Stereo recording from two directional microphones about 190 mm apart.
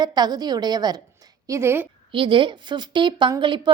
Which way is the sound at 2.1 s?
25° right (ahead or behind).